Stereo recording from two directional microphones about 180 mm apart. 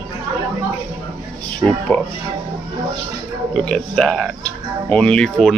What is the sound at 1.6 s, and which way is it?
Speech, 20° right (ahead or behind).